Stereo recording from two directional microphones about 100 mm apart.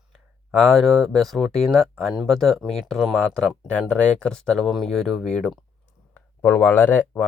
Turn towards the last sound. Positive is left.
turn(degrees=20)  # may be behind; listen again after turning